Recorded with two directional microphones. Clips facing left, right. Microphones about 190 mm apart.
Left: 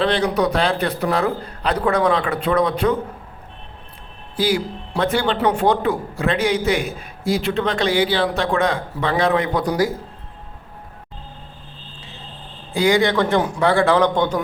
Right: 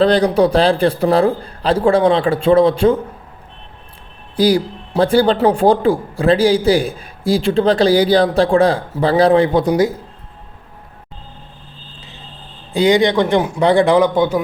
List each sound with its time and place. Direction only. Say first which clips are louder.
0.0 s a man's voice: right 6 dB; 35° right (ahead or behind)
4.4 s a man's voice: right 6 dB; 35° right (ahead or behind)
12.7 s a man's voice: right 4 dB; 20° right (ahead or behind)